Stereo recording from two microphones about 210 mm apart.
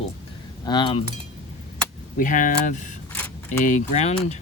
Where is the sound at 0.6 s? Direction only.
20° left (ahead or behind).